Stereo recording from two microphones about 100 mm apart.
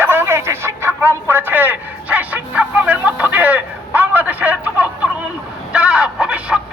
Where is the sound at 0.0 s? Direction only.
25° right (ahead or behind).